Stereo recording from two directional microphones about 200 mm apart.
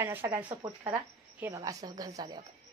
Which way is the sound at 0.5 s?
20° right (ahead or behind).